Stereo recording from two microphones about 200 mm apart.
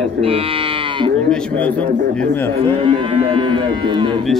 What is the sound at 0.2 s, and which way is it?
Livestock, 30° right (ahead or behind).